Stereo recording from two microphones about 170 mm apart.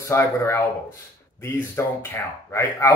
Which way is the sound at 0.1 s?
15° left (ahead or behind).